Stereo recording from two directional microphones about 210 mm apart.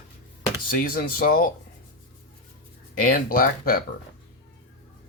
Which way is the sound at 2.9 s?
40° left (ahead or behind).